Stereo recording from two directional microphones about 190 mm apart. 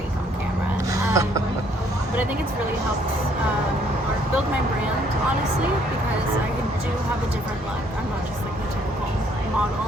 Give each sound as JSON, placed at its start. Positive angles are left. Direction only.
{"t": 1.1, "sound": "speech", "side_deg": -15}